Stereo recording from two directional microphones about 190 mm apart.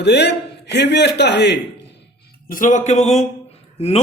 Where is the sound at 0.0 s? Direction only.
60° left (ahead or behind).